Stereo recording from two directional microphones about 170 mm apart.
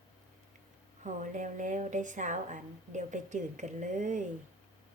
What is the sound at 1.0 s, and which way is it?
A woman's voice, 45° right (ahead or behind).